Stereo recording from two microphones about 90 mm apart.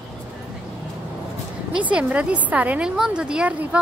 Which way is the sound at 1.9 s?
15° right (ahead or behind).